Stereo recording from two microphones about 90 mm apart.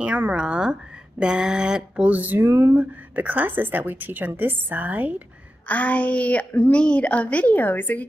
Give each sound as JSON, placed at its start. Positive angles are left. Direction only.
{"t": 0.0, "sound": "a woman's voice", "side_deg": -15}
{"t": 5.7, "sound": "a woman's voice", "side_deg": 15}